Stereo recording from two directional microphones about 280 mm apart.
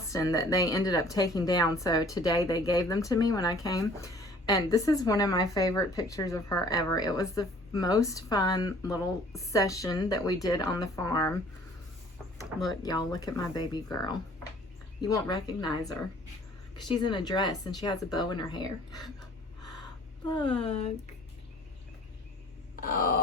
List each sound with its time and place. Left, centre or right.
0.1 s speech: centre
12.4 s speech: centre
12.8 s speech: centre
16.9 s speech: centre
20.3 s speech: centre
22.8 s a sound: left